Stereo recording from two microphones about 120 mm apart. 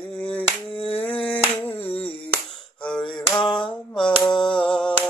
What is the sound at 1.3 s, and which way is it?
Mantra, 15° left (ahead or behind).